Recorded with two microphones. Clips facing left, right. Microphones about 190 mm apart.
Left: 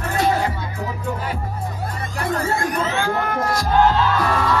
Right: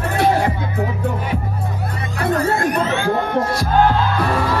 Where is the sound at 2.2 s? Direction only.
60° right (ahead or behind).